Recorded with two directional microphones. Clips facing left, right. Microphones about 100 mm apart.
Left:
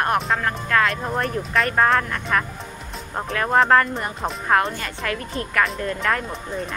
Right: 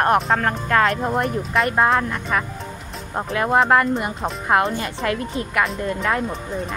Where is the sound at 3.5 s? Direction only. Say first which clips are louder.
Even; 10° right (ahead or behind).